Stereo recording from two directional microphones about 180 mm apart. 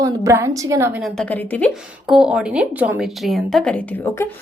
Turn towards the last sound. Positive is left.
turn(degrees=10)  # may be behind; listen again after turning